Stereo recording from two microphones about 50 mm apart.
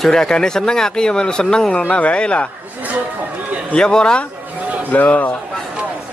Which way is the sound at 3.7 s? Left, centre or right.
Centre.